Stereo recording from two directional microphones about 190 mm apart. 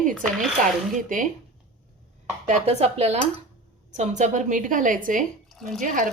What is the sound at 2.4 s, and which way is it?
A woman's voice, 35° right (ahead or behind).